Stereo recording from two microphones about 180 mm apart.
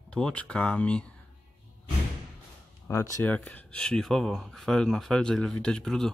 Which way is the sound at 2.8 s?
15° left (ahead or behind).